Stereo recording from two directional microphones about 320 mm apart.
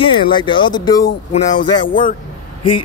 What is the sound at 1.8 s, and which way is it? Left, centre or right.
Speech, left.